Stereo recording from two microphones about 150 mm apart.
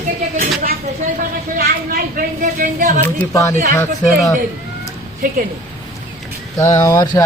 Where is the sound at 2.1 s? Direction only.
65° right (ahead or behind).